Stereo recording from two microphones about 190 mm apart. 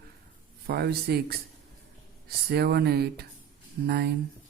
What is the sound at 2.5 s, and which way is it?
Speech, 55° right (ahead or behind).